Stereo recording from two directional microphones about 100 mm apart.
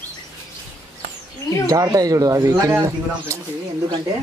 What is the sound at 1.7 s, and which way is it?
Speech, 35° right (ahead or behind).